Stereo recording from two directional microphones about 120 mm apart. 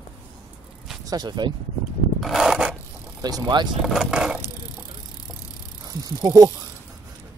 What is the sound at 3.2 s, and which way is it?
Speech, 35° right (ahead or behind).